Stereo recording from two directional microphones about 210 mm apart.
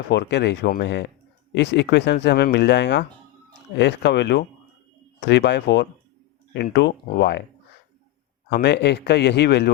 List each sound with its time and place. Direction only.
0.1 s speech: 55° left (ahead or behind)
8.4 s a man's voice: 55° left (ahead or behind)